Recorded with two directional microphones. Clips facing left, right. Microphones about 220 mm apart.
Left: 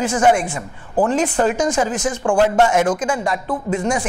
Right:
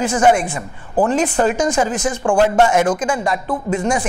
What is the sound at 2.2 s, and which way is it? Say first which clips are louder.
Speech: right 1 dB; 25° right (ahead or behind).